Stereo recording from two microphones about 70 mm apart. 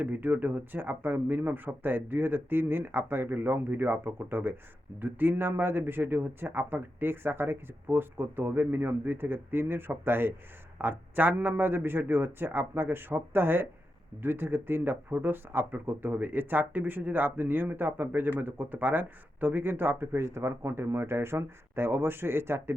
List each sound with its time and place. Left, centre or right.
0.0 s speech: right